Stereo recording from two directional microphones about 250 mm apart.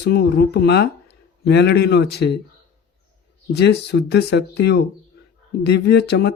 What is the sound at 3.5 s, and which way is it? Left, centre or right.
Speech, left.